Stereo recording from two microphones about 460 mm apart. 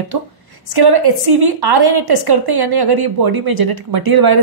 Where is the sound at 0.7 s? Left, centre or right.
Right.